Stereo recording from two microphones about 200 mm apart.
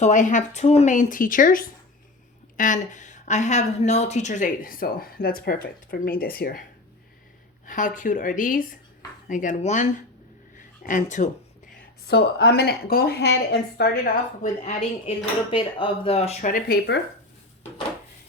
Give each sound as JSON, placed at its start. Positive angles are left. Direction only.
{"t": 0.0, "sound": "a woman's voice", "side_deg": 40}
{"t": 7.7, "sound": "a woman's voice", "side_deg": 40}
{"t": 12.0, "sound": "speech", "side_deg": 55}
{"t": 14.6, "sound": "a woman's voice", "side_deg": 30}